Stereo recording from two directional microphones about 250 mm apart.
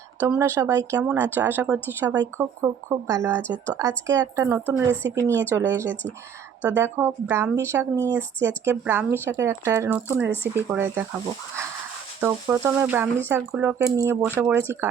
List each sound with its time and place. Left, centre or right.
0.2 s speech: centre
4.9 s speech: right
5.3 s speech: centre
5.9 s speech: centre
6.6 s speech: centre
12.2 s speech: centre